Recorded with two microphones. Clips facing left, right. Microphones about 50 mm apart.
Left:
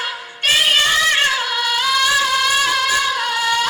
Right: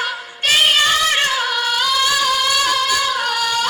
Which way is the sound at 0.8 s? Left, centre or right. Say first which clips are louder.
Even; centre.